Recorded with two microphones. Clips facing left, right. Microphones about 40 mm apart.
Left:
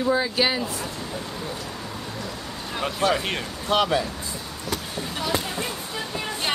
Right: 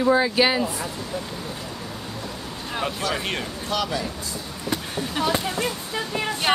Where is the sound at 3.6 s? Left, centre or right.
Left.